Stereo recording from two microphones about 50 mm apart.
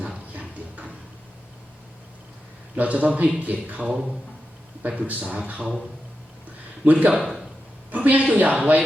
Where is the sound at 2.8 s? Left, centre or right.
Right.